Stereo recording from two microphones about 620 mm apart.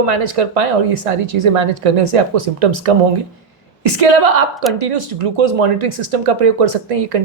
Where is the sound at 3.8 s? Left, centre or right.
Right.